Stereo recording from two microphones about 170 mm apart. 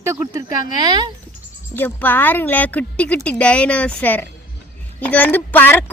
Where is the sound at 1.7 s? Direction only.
10° left (ahead or behind).